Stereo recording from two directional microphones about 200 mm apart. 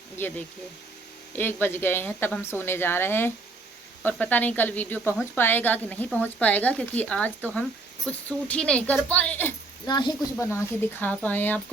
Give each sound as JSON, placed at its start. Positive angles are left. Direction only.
{"t": 0.2, "sound": "a woman's voice", "side_deg": 10}
{"t": 9.8, "sound": "speech", "side_deg": 20}
{"t": 10.3, "sound": "a woman's voice", "side_deg": 10}